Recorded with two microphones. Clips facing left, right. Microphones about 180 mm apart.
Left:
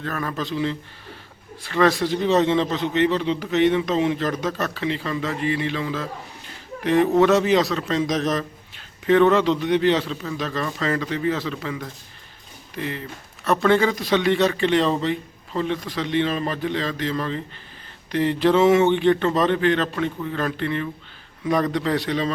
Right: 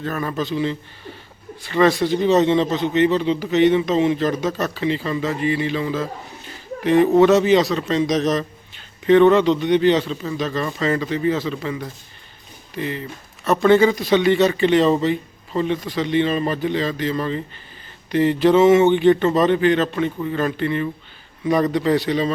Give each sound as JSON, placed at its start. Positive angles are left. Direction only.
{"t": 0.0, "sound": "a man's voice", "side_deg": -5}